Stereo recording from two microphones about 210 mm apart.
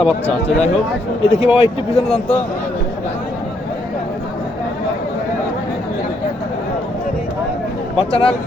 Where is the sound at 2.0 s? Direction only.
5° left (ahead or behind).